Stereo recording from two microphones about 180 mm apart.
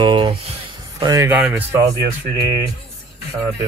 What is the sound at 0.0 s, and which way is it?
Speech, 25° right (ahead or behind).